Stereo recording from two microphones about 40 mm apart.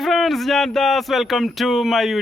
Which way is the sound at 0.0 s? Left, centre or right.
Centre.